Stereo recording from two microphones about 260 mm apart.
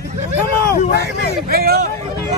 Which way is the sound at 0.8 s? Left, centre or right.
Left.